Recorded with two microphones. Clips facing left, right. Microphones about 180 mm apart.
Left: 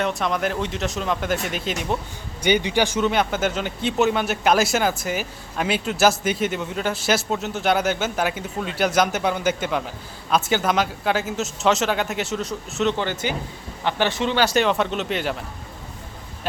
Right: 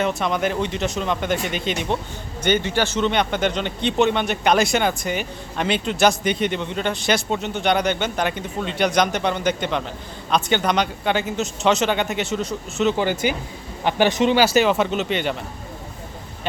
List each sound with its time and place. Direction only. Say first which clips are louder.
0.0 s speech: right 2 dB; centre (ahead or behind)
2.4 s speech: left 1 dB; 10° left (ahead or behind); by 14.4 s 15° right (ahead or behind)
14.4 s speech: right 2 dB; 5° right (ahead or behind)